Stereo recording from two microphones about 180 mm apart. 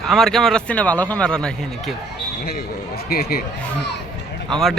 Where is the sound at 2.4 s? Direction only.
60° left (ahead or behind).